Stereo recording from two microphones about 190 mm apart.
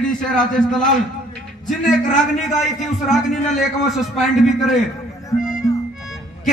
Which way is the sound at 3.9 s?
Centre (ahead or behind).